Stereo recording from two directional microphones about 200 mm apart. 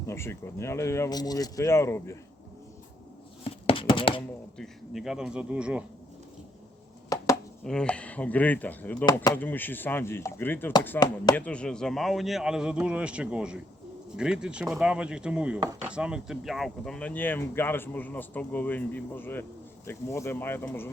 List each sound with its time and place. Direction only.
0.1 s speech: 15° left (ahead or behind)
3.4 s a sound: 25° left (ahead or behind)
4.5 s speech: centre (ahead or behind)
7.6 s speech: 5° left (ahead or behind)